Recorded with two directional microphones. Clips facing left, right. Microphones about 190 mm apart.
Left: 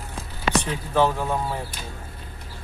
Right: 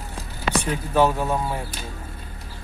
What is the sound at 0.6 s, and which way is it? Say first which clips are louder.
Speech: right 4 dB; 10° right (ahead or behind).